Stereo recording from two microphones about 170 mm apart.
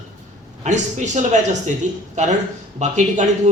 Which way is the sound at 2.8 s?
45° right (ahead or behind).